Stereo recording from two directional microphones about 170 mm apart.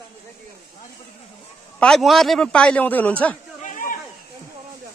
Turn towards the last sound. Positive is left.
turn(degrees=50)  # may be behind; listen again after turning